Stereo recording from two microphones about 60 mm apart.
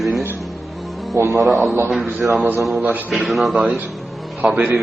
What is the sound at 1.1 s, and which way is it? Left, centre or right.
Speech, right.